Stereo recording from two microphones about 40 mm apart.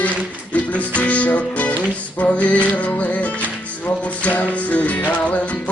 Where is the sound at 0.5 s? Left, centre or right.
Left.